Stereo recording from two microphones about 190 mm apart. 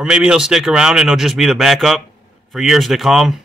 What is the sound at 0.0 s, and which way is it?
Speech, 5° right (ahead or behind).